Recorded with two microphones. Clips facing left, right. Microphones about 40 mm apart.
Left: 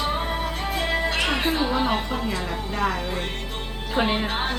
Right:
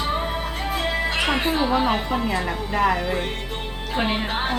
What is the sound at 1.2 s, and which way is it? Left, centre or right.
Speech, centre.